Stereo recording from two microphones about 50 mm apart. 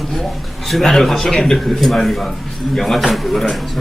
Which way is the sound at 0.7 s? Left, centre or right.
Centre.